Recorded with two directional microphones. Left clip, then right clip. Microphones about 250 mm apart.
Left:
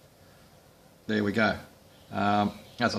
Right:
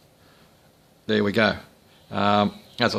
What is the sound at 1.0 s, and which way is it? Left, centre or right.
Speech, right.